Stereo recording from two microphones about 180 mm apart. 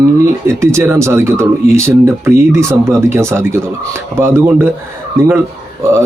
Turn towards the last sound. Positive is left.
turn(degrees=-15)  # may be behind; listen again after turning